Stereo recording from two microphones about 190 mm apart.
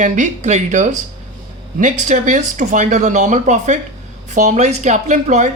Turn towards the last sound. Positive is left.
turn(degrees=-40)  # may be behind; listen again after turning